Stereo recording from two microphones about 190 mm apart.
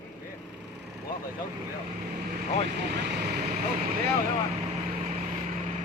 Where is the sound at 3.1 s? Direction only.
55° right (ahead or behind).